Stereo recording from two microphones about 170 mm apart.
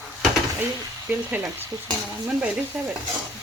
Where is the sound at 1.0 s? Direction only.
10° right (ahead or behind).